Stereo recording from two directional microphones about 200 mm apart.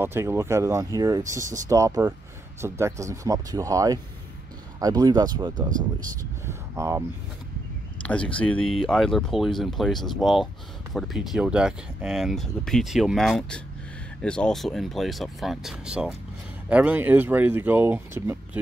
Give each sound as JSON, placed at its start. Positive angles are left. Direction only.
{"t": 0.0, "sound": "speech", "side_deg": -10}
{"t": 5.7, "sound": "speech", "side_deg": -40}
{"t": 6.4, "sound": "speech", "side_deg": -15}
{"t": 8.0, "sound": "speech", "side_deg": 5}